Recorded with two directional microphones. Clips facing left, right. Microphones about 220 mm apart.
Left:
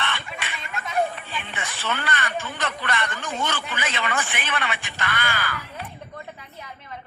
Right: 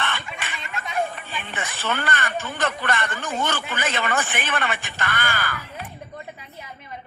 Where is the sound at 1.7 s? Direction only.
50° right (ahead or behind).